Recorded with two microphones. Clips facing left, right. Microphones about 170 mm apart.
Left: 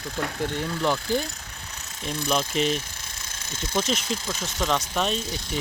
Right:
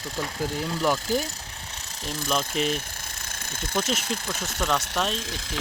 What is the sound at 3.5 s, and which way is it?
Speech, 55° right (ahead or behind).